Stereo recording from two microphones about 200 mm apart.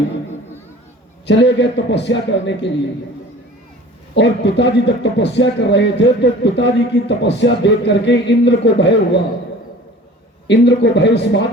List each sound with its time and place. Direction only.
1.3 s a man's voice: 60° left (ahead or behind)
4.1 s a man's voice: 60° left (ahead or behind)
10.4 s a man's voice: 60° left (ahead or behind)